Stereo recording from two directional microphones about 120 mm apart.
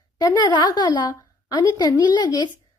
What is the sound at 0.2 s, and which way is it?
A woman's voice, 35° left (ahead or behind).